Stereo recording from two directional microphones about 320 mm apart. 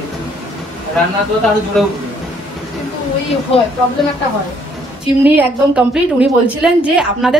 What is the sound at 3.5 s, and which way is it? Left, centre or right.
Speech, centre.